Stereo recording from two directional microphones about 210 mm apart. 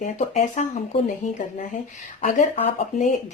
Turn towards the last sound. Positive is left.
turn(degrees=35)  # may be behind; listen again after turning